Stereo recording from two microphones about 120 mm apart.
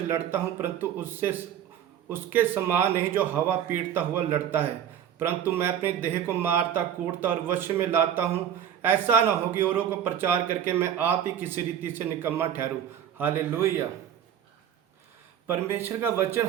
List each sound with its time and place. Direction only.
0.1 s speech: 15° right (ahead or behind)
15.4 s a man's voice: 20° right (ahead or behind)